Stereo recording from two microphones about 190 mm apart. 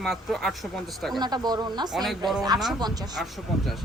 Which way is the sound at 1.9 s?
Centre (ahead or behind).